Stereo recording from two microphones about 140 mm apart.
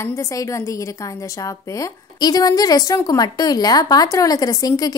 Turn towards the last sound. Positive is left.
turn(degrees=25)  # may be behind; listen again after turning